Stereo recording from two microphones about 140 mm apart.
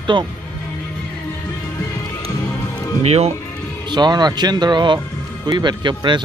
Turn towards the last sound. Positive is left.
turn(degrees=-35)  # may be behind; listen again after turning